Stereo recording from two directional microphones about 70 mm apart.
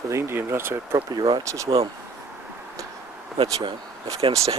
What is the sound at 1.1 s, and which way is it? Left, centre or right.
Speech, right.